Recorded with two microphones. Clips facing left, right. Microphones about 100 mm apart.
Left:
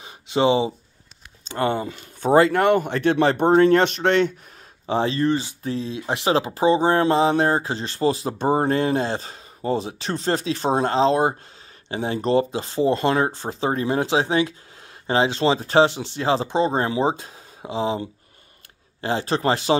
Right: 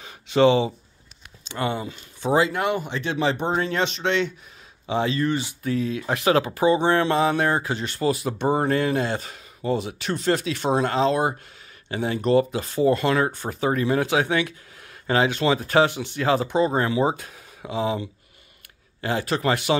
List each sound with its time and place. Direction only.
0.0 s a sound: 20° left (ahead or behind)
1.5 s speech: 40° left (ahead or behind)
4.8 s speech: 35° left (ahead or behind)